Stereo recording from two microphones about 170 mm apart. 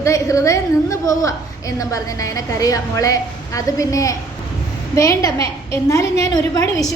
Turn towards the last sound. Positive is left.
turn(degrees=20)  # may be behind; listen again after turning